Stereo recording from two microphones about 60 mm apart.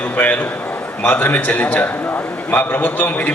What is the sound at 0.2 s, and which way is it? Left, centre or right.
A man's voice, left.